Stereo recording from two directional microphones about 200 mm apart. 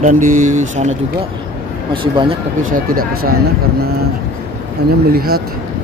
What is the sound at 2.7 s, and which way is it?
Speech, 45° right (ahead or behind).